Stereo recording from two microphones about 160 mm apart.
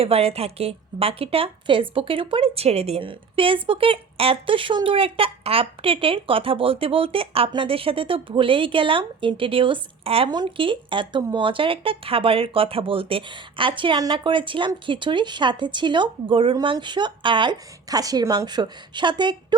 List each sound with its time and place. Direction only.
0.0 s a woman's voice: 40° right (ahead or behind)